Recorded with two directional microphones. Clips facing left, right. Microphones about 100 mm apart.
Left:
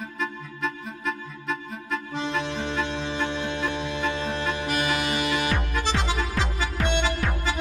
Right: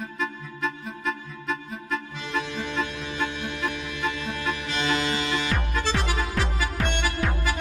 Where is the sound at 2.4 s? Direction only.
30° left (ahead or behind).